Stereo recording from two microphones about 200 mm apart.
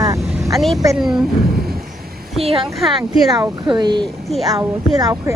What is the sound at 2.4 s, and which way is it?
Speech, 30° right (ahead or behind).